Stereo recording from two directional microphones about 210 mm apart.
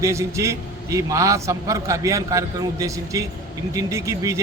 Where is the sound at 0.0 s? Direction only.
15° right (ahead or behind).